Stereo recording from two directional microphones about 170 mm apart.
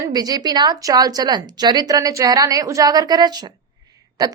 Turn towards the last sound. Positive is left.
turn(degrees=-20)  # may be behind; listen again after turning